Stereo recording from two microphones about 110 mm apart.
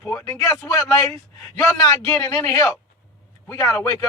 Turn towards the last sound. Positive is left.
turn(degrees=25)  # may be behind; listen again after turning